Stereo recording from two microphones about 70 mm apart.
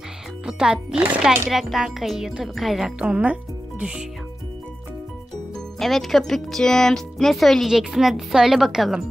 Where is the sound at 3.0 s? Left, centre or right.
Centre.